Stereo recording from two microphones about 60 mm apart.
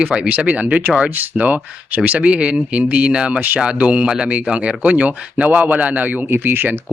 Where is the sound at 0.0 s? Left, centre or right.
Centre.